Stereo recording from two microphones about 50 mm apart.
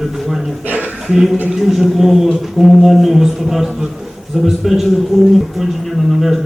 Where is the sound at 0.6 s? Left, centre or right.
Right.